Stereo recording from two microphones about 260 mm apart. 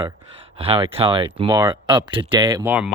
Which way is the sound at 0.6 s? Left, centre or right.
Right.